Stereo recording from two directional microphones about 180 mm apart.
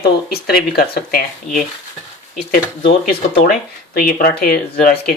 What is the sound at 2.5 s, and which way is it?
Speech, 60° left (ahead or behind).